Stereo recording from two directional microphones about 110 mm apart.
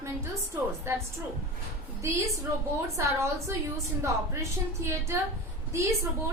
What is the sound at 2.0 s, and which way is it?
A woman's voice, 25° right (ahead or behind).